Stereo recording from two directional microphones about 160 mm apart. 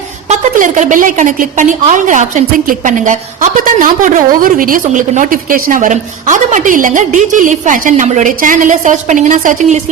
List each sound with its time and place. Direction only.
0.3 s a woman's voice: 55° right (ahead or behind)